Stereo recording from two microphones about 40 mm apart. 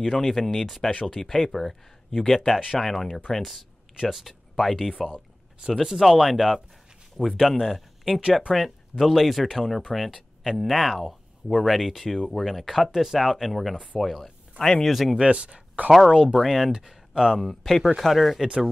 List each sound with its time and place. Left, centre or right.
0.0 s speech: centre
4.1 s speech: centre
5.6 s speech: centre
8.2 s speech: centre
9.0 s speech: centre
14.6 s speech: centre
14.9 s speech: centre
15.1 s speech: right
16.1 s speech: right
16.3 s speech: centre
17.4 s speech: centre